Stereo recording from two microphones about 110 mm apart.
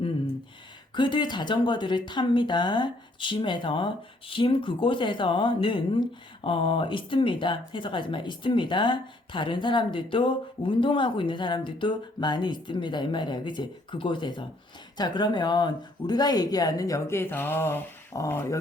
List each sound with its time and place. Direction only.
0.9 s speech: 45° left (ahead or behind); by 18.4 s 25° left (ahead or behind)